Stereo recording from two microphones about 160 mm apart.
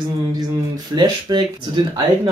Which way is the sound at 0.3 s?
25° right (ahead or behind).